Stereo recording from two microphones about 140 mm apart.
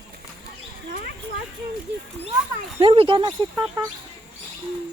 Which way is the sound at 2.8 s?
40° right (ahead or behind).